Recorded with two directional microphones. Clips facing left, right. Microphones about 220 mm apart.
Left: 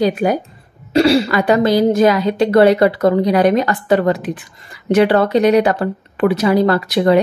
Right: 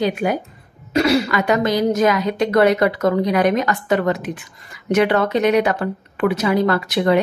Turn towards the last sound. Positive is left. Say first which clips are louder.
# left 4 dB
turn(degrees=35)  # may be behind; listen again after turning